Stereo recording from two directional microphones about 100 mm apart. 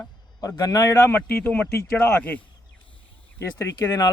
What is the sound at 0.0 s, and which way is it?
Speech, 40° left (ahead or behind).